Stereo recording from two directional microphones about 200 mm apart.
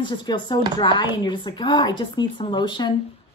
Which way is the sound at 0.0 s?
20° left (ahead or behind).